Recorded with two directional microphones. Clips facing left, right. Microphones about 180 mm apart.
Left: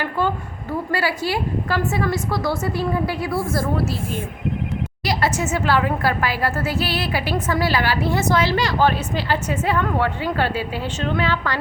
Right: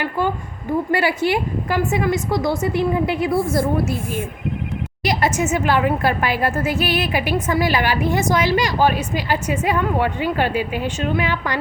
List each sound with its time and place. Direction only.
0.0 s a woman's voice: 15° right (ahead or behind)